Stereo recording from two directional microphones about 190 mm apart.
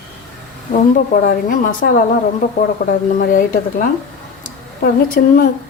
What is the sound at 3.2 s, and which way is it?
Speech, 45° left (ahead or behind).